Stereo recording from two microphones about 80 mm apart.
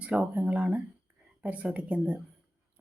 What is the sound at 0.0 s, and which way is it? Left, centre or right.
Speech, centre.